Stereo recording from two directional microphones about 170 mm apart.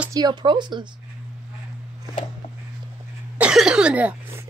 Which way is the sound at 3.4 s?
5° right (ahead or behind).